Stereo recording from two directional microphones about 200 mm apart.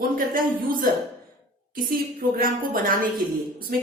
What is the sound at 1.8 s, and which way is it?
A woman's voice, 45° right (ahead or behind).